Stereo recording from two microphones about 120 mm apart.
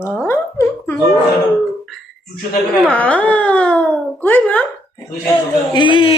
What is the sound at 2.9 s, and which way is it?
Speech, 10° left (ahead or behind).